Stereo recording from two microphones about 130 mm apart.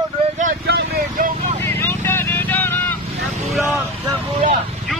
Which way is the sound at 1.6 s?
20° left (ahead or behind).